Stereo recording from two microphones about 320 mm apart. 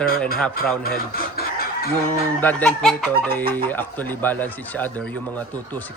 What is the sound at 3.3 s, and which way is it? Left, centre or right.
Speech, right.